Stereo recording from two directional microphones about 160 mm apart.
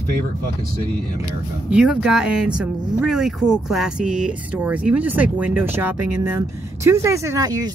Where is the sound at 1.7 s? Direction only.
5° right (ahead or behind); by 7.7 s 20° right (ahead or behind).